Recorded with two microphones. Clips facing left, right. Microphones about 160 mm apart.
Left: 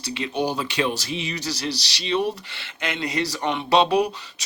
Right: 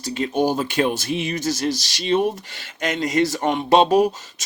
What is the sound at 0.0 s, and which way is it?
Speech, 45° right (ahead or behind).